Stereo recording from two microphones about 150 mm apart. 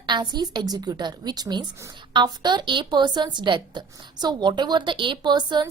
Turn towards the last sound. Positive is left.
turn(degrees=-30)  # may be behind; listen again after turning